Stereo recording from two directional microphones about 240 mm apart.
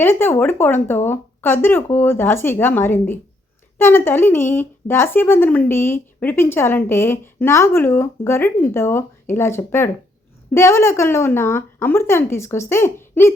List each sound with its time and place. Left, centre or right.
0.0 s speech: centre